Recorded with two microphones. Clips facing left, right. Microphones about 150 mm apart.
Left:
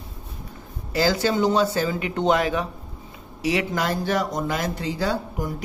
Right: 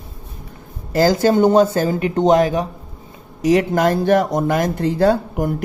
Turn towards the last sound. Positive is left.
turn(degrees=-60)  # may be behind; listen again after turning